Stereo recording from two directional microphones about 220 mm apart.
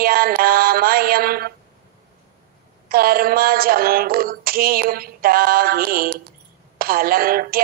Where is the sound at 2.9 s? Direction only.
40° right (ahead or behind).